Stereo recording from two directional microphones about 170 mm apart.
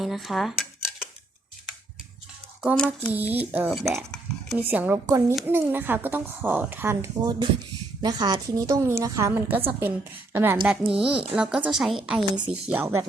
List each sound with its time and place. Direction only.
0.0 s cutlery: centre (ahead or behind)
2.6 s a woman's voice: centre (ahead or behind)
3.1 s speech: 10° right (ahead or behind)
3.7 s a woman's voice: centre (ahead or behind)
4.5 s a woman's voice: 10° right (ahead or behind)